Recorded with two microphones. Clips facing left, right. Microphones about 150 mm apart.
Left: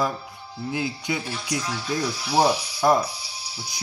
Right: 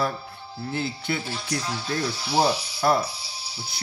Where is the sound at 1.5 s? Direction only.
30° right (ahead or behind).